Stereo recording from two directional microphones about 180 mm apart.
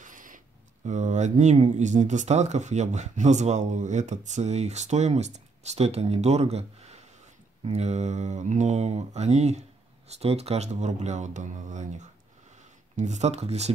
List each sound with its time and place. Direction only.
0.0 s a sound: 45° right (ahead or behind)
0.8 s speech: 40° right (ahead or behind)
12.9 s speech: 40° right (ahead or behind)